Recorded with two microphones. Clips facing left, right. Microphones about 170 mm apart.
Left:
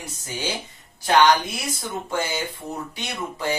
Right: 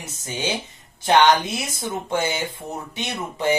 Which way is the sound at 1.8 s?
20° right (ahead or behind).